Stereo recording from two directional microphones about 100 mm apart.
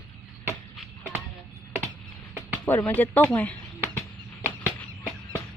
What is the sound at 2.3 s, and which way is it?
Speech, 20° left (ahead or behind).